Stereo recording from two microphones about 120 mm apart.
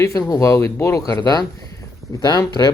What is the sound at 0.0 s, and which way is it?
Speech, 30° left (ahead or behind).